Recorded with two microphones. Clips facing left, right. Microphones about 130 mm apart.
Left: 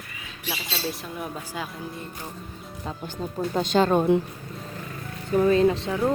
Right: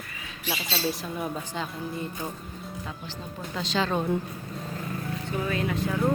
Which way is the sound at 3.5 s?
50° left (ahead or behind).